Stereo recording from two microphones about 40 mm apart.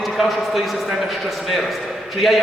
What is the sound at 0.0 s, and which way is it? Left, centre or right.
A man's voice, centre.